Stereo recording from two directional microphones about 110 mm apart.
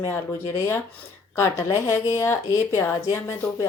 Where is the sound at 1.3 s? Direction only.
25° left (ahead or behind).